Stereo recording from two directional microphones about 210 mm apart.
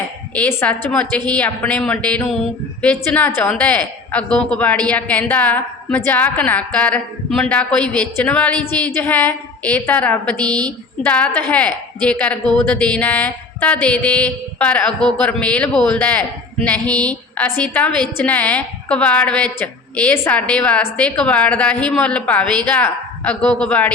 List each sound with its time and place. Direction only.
0.3 s a woman's voice: 10° left (ahead or behind)
10.3 s a woman's voice: 20° right (ahead or behind)
10.7 s a woman's voice: 5° left (ahead or behind)